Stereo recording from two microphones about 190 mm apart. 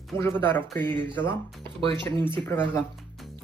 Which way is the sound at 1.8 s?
30° right (ahead or behind).